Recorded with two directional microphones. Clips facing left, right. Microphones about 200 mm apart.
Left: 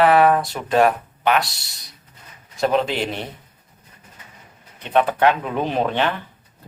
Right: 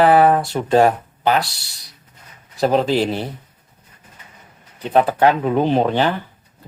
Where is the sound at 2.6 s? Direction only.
35° right (ahead or behind).